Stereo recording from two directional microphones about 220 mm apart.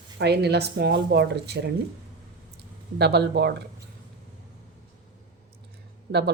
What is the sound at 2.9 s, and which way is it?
Speech, 45° right (ahead or behind).